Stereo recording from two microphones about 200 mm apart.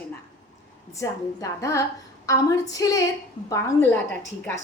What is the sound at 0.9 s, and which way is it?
A woman's voice, 15° left (ahead or behind).